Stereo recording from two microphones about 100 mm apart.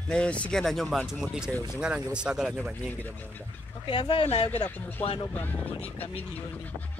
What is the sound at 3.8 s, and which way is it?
Speech, 50° left (ahead or behind).